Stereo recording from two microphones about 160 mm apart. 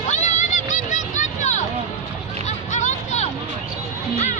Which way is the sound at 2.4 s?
50° left (ahead or behind).